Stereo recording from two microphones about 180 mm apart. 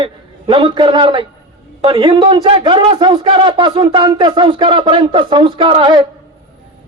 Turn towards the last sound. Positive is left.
turn(degrees=-30)  # may be behind; listen again after turning